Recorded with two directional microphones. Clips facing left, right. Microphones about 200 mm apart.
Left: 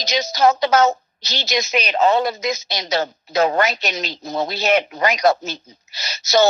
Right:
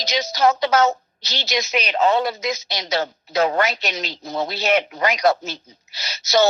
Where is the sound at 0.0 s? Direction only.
45° left (ahead or behind).